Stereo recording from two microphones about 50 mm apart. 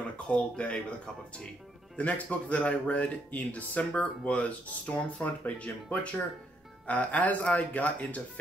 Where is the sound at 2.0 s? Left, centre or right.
Left.